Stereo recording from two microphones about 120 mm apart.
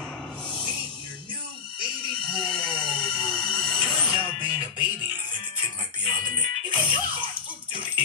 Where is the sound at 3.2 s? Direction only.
5° left (ahead or behind).